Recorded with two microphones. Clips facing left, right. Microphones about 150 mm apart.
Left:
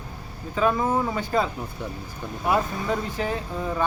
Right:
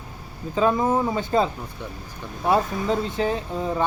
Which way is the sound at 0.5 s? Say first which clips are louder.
Right 2 dB; 20° right (ahead or behind).